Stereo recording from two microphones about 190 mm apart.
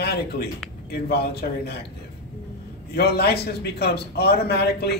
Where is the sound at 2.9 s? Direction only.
55° left (ahead or behind).